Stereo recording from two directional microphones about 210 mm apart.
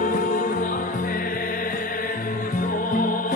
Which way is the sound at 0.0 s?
40° left (ahead or behind).